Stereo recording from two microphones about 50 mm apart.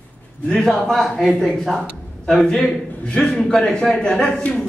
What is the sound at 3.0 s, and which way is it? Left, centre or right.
A man's voice, centre.